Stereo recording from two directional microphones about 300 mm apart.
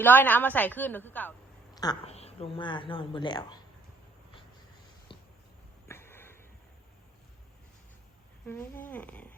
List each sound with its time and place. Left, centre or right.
0.0 s a woman's voice: centre
5.1 s a sound: centre
5.9 s sniff: centre
8.4 s speech: centre